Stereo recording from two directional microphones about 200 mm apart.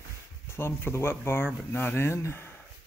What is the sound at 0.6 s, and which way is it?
Speech, 10° left (ahead or behind).